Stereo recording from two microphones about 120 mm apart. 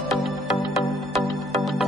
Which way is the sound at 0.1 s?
Centre (ahead or behind).